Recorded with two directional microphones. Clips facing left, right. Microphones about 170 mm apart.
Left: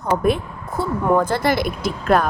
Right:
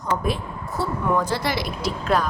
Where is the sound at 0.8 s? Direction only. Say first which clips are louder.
Left 5 dB; 50° left (ahead or behind).